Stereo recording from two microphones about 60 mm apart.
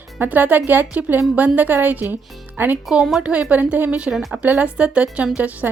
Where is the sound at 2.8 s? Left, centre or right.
Centre.